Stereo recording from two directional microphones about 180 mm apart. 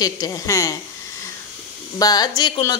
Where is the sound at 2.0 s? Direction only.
20° left (ahead or behind).